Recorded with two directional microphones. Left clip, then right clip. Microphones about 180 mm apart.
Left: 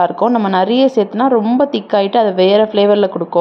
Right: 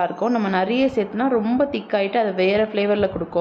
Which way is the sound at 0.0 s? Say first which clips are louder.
Left 8 dB; 30° left (ahead or behind).